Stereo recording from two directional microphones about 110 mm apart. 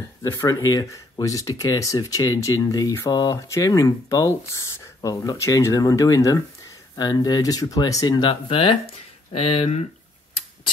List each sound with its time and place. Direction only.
0.2 s speech: 25° left (ahead or behind)
8.3 s speech: 55° left (ahead or behind)